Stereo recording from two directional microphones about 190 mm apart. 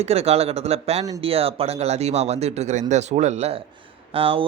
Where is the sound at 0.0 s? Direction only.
35° right (ahead or behind).